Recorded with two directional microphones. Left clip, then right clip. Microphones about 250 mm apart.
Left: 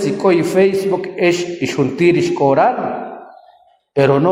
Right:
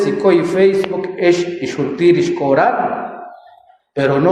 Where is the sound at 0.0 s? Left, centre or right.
Left.